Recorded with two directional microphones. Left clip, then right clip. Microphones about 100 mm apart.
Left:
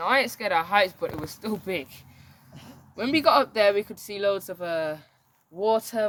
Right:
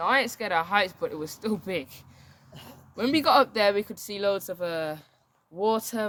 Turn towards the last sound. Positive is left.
turn(degrees=-45)  # may be behind; listen again after turning